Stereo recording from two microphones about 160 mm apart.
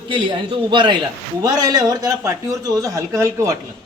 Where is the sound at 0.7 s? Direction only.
30° right (ahead or behind).